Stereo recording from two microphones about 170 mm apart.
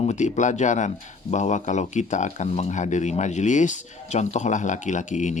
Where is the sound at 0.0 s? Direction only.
45° left (ahead or behind).